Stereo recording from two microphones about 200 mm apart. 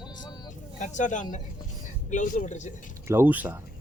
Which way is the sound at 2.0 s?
40° left (ahead or behind).